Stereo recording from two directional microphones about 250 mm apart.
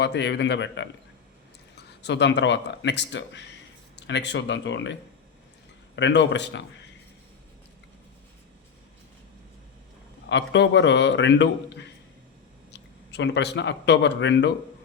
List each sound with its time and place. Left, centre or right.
0.0 s a man's voice: left
2.0 s a man's voice: left
6.0 s a man's voice: left
10.2 s a man's voice: left